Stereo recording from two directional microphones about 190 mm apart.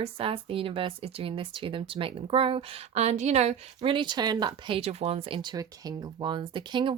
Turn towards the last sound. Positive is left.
turn(degrees=-25)  # may be behind; listen again after turning